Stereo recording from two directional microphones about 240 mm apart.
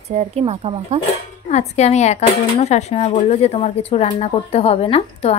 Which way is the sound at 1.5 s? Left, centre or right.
Left.